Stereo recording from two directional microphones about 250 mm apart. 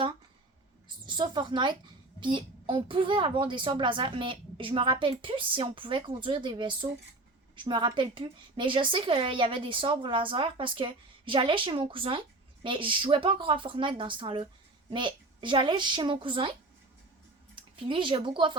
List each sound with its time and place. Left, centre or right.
0.9 s a woman's voice: centre